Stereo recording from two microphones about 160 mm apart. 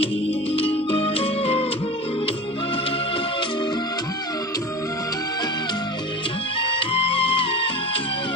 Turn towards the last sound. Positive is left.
turn(degrees=35)  # may be behind; listen again after turning